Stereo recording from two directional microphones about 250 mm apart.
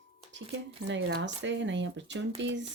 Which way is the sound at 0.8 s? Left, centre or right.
Right.